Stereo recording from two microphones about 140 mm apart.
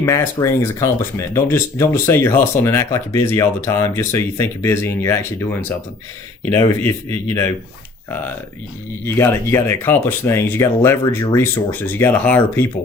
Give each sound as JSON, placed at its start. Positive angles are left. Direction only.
{"t": 0.0, "sound": "speech", "side_deg": 20}
{"t": 9.0, "sound": "speech", "side_deg": 15}